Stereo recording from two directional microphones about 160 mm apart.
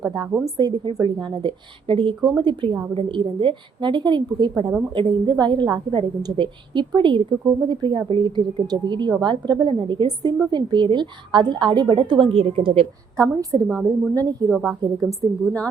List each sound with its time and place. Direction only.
0.0 s a woman's voice: 25° right (ahead or behind)
13.1 s a woman's voice: 20° right (ahead or behind)
13.7 s a woman's voice: 5° right (ahead or behind)
14.1 s a woman's voice: 20° right (ahead or behind)
14.5 s a woman's voice: 5° right (ahead or behind)